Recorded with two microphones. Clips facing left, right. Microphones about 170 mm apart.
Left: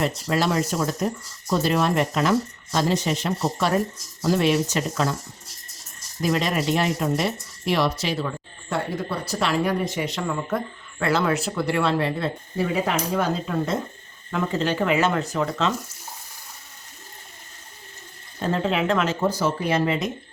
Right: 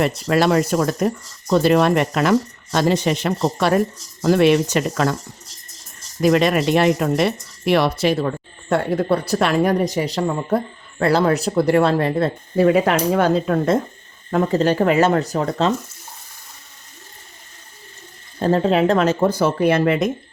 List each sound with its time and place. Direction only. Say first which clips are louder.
0.0 s speech: right 6 dB; 70° right (ahead or behind)
6.2 s speech: right 7 dB; 70° right (ahead or behind)
14.3 s speech: right 7 dB; 40° right (ahead or behind)
18.4 s speech: right 7 dB; 40° right (ahead or behind)
19.3 s speech: right 6 dB; 60° right (ahead or behind)